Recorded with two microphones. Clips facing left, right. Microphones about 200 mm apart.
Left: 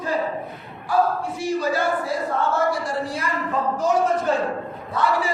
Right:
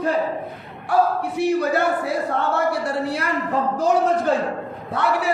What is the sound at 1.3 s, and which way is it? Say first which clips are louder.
Speech: right 5 dB; 60° right (ahead or behind).